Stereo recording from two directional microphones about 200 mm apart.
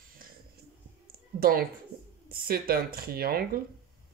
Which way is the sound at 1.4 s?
45° right (ahead or behind).